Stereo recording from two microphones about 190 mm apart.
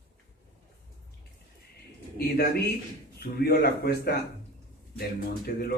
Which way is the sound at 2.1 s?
55° left (ahead or behind).